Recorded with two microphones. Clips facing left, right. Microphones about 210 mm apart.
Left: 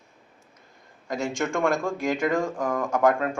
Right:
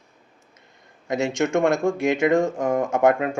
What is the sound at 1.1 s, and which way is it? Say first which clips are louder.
Speech: right 5 dB; 20° right (ahead or behind).